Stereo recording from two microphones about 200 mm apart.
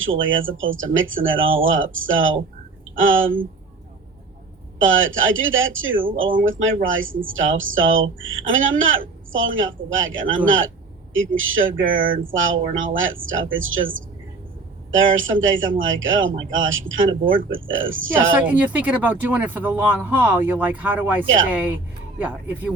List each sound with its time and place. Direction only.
0.0 s a woman's voice: 75° right (ahead or behind)
4.8 s a woman's voice: 75° right (ahead or behind)
11.8 s speech: 45° right (ahead or behind)
12.1 s a woman's voice: 75° right (ahead or behind)
18.4 s speech: 10° right (ahead or behind)